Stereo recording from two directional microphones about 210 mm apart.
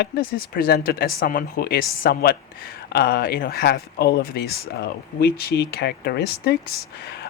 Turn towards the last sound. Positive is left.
turn(degrees=50)  # may be behind; listen again after turning